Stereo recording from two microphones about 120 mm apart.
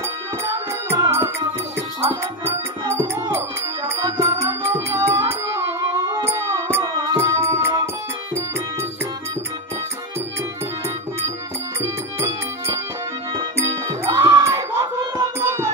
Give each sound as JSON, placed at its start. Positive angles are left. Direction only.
{"t": 0.9, "sound": "music", "side_deg": -25}
{"t": 11.8, "sound": "music", "side_deg": -25}